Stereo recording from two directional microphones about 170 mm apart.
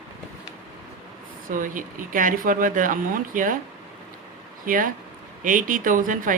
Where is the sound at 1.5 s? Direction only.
55° right (ahead or behind).